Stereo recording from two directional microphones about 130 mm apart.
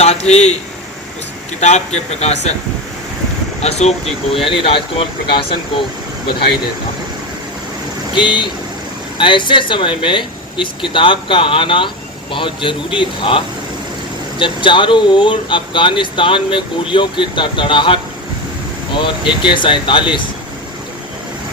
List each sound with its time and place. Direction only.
0.0 s a man's voice: 55° left (ahead or behind)
1.6 s speech: 60° left (ahead or behind)
3.6 s speech: 55° left (ahead or behind)
8.1 s speech: 40° left (ahead or behind)